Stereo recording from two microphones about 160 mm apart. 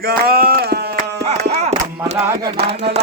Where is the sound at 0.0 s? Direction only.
75° right (ahead or behind).